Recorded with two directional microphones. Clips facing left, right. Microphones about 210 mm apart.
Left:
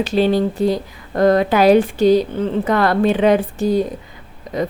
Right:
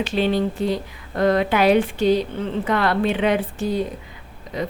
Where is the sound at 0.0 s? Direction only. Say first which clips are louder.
Left 5 dB; 40° left (ahead or behind).